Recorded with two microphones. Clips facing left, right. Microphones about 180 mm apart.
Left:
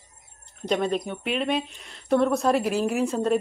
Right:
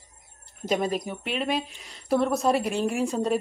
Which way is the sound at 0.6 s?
5° right (ahead or behind).